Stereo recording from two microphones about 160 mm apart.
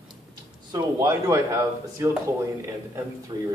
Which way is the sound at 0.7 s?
20° right (ahead or behind).